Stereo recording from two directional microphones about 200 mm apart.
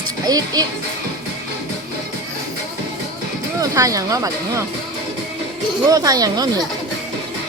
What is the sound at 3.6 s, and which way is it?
Speech, 15° right (ahead or behind).